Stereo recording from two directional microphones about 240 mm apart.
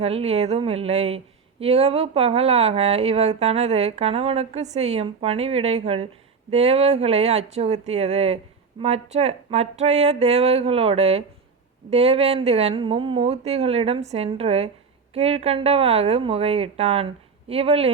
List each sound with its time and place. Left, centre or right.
0.0 s speech: right